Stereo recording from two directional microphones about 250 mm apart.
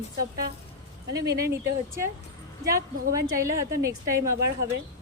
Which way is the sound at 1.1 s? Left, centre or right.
Right.